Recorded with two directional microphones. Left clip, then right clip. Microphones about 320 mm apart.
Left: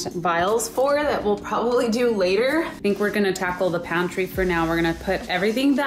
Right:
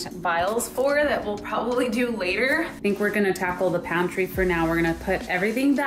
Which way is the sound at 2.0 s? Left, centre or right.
Centre.